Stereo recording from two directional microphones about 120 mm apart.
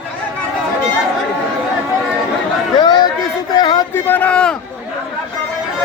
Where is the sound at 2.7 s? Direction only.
35° left (ahead or behind).